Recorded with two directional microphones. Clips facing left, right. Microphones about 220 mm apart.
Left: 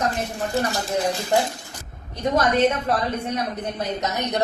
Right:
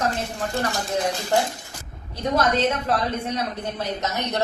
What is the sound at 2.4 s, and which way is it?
A woman's voice, 15° left (ahead or behind).